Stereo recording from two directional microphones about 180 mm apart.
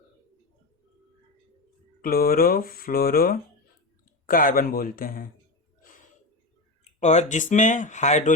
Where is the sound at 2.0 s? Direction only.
55° left (ahead or behind).